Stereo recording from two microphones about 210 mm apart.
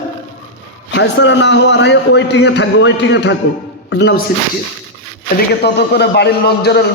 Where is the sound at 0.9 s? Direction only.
55° left (ahead or behind).